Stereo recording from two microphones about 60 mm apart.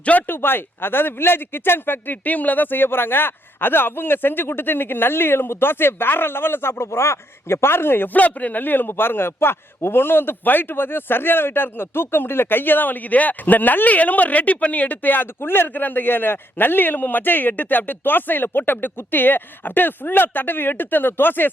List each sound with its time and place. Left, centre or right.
0.0 s speech: left